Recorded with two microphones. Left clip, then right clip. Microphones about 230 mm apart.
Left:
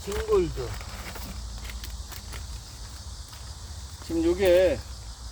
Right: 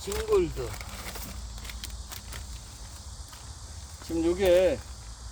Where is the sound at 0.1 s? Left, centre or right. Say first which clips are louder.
Left 1 dB; right.